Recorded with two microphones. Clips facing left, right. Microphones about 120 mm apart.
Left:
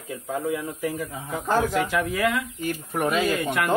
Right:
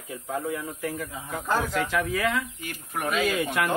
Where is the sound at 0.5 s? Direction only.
15° left (ahead or behind).